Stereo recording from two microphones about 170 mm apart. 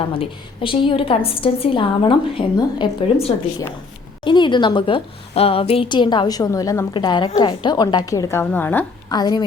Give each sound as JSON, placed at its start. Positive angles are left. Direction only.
{"t": 0.2, "sound": "a woman's voice", "side_deg": 30}
{"t": 9.0, "sound": "a woman's voice", "side_deg": 25}